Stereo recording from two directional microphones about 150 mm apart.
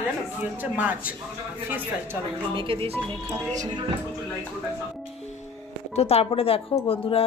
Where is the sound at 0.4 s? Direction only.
10° right (ahead or behind).